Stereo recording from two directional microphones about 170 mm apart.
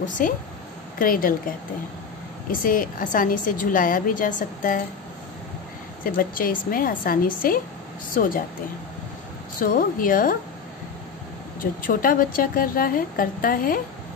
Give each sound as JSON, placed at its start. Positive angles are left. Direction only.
{"t": 0.2, "sound": "a woman's voice", "side_deg": 50}
{"t": 2.6, "sound": "a woman's voice", "side_deg": 55}
{"t": 6.0, "sound": "a woman's voice", "side_deg": 55}
{"t": 9.6, "sound": "a woman's voice", "side_deg": 55}
{"t": 11.6, "sound": "a woman's voice", "side_deg": 55}